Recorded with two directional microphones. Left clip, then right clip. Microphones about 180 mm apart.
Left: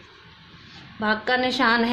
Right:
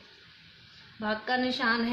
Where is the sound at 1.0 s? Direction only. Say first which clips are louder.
Left 7 dB; 55° left (ahead or behind).